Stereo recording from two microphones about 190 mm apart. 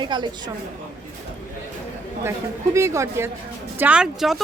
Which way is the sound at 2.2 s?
15° right (ahead or behind).